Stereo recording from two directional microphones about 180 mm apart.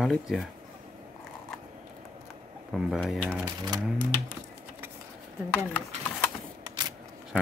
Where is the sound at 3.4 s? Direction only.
20° right (ahead or behind).